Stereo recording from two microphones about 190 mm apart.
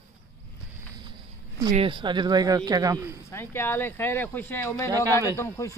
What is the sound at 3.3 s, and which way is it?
Speech, 10° left (ahead or behind).